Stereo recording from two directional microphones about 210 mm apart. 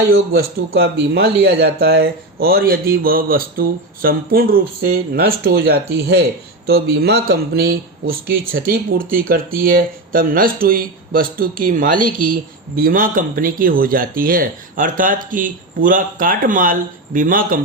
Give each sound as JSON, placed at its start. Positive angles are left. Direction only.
{"t": 0.7, "sound": "speech", "side_deg": -50}